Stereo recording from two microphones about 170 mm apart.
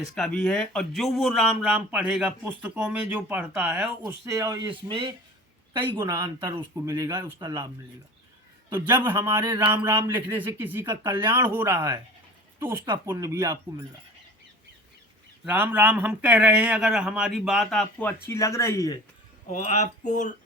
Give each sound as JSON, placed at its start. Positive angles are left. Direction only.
{"t": 0.1, "sound": "a man's voice", "side_deg": 5}
{"t": 6.0, "sound": "speech", "side_deg": -20}
{"t": 8.7, "sound": "a man's voice", "side_deg": -10}
{"t": 15.4, "sound": "a man's voice", "side_deg": -10}
{"t": 18.3, "sound": "speech", "side_deg": 15}
{"t": 19.5, "sound": "speech", "side_deg": 45}